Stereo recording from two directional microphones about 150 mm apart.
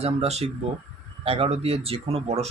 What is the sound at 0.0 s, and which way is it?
Speech, 45° right (ahead or behind).